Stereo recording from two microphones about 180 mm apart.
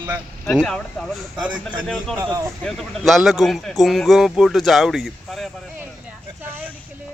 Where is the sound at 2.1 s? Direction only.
15° right (ahead or behind).